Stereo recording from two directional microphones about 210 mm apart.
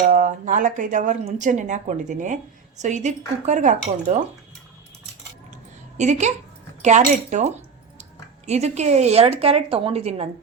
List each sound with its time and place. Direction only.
0.1 s speech: 40° right (ahead or behind)
6.0 s speech: 35° right (ahead or behind)